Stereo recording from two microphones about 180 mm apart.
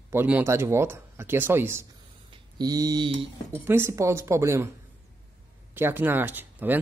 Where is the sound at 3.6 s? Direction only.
15° right (ahead or behind).